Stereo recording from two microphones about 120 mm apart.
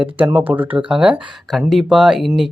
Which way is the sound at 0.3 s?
15° right (ahead or behind).